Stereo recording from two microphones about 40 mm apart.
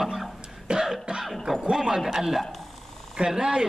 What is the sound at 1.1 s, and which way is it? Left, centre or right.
Music, right.